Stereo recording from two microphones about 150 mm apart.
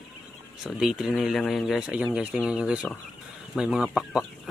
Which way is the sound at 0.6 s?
5° right (ahead or behind).